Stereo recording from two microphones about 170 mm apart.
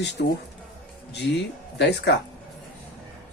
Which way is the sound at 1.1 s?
80° left.